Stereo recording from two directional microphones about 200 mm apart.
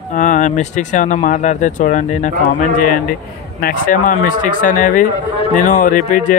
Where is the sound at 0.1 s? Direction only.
40° left (ahead or behind).